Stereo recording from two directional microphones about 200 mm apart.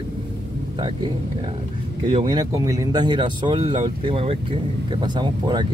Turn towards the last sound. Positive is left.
turn(degrees=-20)  # may be behind; listen again after turning